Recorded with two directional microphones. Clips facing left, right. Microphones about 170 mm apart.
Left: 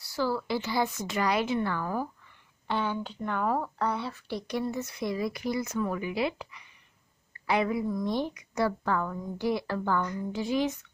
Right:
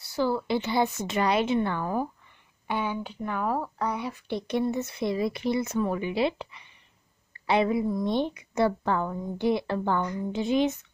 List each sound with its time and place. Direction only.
0.0 s speech: 20° right (ahead or behind)